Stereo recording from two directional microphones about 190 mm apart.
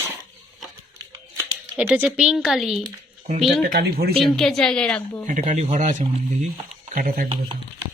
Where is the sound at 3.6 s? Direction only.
55° right (ahead or behind).